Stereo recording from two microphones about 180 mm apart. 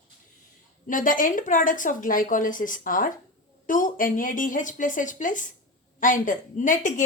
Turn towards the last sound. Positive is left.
turn(degrees=45)  # may be behind; listen again after turning